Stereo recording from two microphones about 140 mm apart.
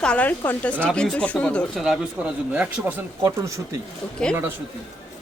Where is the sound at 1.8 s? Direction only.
5° right (ahead or behind); by 3.8 s 20° right (ahead or behind).